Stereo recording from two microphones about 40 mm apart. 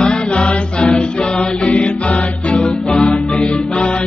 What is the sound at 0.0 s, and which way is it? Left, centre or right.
Music, left.